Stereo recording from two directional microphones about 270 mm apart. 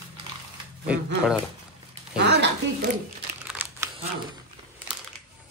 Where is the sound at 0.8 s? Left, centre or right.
Centre.